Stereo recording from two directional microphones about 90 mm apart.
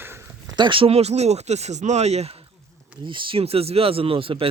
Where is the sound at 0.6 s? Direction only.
70° right (ahead or behind).